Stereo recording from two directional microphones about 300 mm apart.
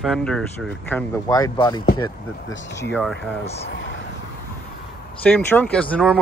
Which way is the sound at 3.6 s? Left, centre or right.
Left.